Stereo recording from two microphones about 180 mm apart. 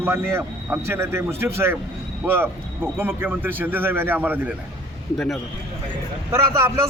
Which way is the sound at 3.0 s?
10° right (ahead or behind).